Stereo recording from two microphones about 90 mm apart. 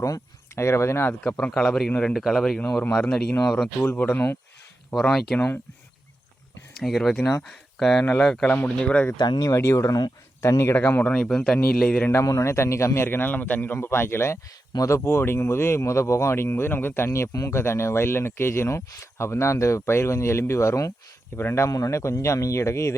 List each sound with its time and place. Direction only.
0.0 s speech: 35° left (ahead or behind)
1.2 s a man's voice: 10° left (ahead or behind)
4.9 s speech: 5° left (ahead or behind)
6.8 s a man's voice: centre (ahead or behind)
9.1 s speech: 55° left (ahead or behind)
9.6 s speech: 30° left (ahead or behind)
10.8 s speech: 20° left (ahead or behind)
11.2 s speech: 5° left (ahead or behind)
12.1 s speech: 35° left (ahead or behind)